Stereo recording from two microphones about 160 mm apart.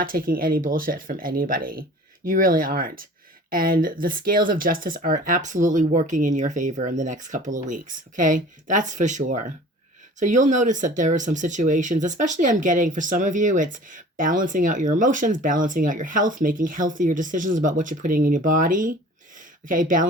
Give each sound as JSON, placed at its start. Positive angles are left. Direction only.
{"t": 0.0, "sound": "speech", "side_deg": -65}